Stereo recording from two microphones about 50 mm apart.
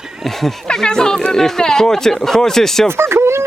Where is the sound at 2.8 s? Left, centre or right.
Right.